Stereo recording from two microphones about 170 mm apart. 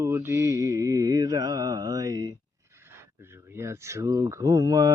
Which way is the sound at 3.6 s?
15° right (ahead or behind).